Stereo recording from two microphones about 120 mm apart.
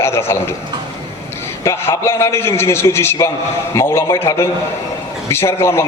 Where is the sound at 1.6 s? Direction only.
20° left (ahead or behind).